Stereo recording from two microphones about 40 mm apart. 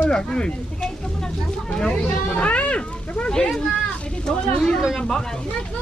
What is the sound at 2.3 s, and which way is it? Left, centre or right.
Cat, left.